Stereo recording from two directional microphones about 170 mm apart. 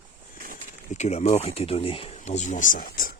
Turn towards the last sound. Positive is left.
turn(degrees=55)  # may be behind; listen again after turning